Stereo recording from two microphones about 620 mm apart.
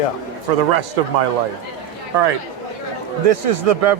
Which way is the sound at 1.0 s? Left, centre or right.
Right.